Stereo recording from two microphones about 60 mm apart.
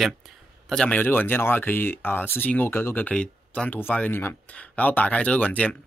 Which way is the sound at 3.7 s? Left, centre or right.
Left.